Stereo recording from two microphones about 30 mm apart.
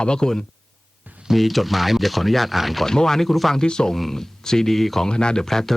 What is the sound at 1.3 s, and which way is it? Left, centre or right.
Speech, centre.